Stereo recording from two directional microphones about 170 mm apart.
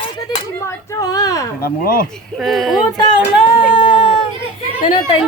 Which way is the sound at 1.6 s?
60° left (ahead or behind).